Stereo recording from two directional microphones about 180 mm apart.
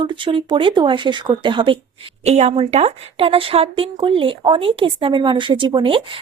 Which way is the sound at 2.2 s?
40° right (ahead or behind).